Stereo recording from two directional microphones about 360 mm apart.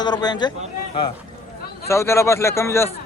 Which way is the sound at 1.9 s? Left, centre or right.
Centre.